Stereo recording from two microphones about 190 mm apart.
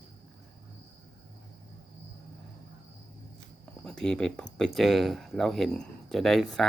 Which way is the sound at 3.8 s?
5° left (ahead or behind).